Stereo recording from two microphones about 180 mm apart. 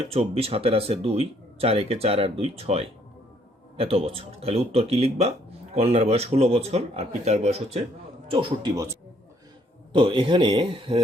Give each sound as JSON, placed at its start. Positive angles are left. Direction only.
{"t": 0.1, "sound": "speech", "side_deg": -35}
{"t": 8.3, "sound": "speech", "side_deg": -25}
{"t": 9.9, "sound": "speech", "side_deg": -30}